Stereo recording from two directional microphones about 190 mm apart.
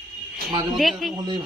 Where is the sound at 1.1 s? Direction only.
20° right (ahead or behind).